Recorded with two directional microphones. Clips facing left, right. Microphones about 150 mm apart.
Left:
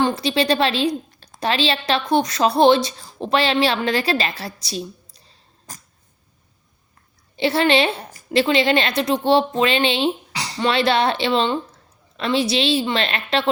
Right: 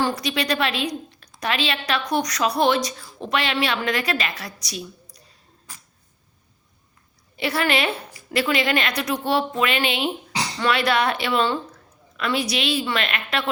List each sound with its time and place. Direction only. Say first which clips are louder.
0.0 s a woman's voice: left 4 dB; 25° left (ahead or behind)
5.7 s cat: left 5 dB; 40° left (ahead or behind)
7.3 s a woman's voice: left 5 dB; 25° left (ahead or behind)